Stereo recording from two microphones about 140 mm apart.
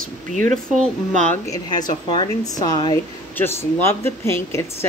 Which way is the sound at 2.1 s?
30° left (ahead or behind).